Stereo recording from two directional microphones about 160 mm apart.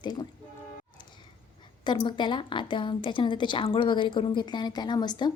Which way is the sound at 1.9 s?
30° left (ahead or behind).